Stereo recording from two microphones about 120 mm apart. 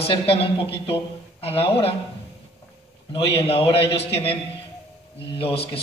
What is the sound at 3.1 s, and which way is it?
A man's voice, 55° left (ahead or behind).